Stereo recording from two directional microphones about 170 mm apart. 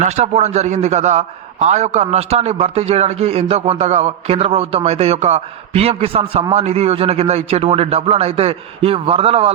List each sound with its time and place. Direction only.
0.0 s a man's voice: 40° right (ahead or behind)